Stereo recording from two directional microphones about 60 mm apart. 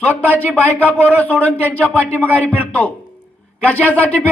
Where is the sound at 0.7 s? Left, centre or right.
Left.